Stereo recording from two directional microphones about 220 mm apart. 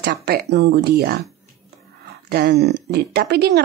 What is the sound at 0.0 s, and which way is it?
A woman's voice, 45° right (ahead or behind).